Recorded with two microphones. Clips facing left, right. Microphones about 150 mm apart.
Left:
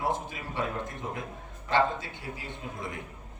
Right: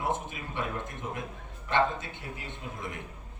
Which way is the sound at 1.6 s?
20° right (ahead or behind).